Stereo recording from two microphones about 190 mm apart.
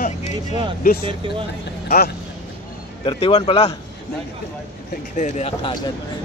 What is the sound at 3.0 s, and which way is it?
Speech, 30° left (ahead or behind).